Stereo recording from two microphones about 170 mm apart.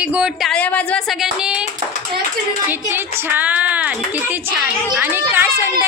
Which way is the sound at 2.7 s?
10° right (ahead or behind).